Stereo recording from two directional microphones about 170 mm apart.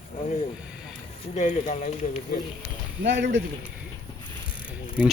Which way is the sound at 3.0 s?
90° right.